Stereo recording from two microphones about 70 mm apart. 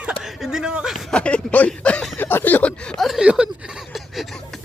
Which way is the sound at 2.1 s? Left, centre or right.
Left.